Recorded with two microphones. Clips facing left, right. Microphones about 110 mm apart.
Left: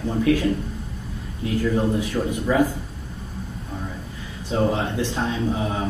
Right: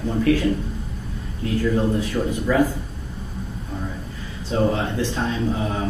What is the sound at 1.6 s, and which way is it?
A man's voice, 15° left (ahead or behind).